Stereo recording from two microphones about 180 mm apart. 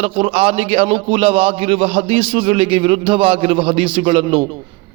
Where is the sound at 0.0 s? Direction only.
30° right (ahead or behind).